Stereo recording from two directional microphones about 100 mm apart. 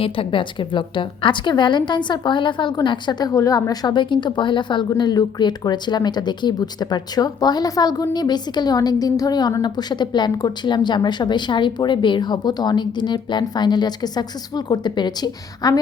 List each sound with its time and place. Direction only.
0.0 s a woman's voice: 60° left (ahead or behind); by 15.8 s 40° left (ahead or behind)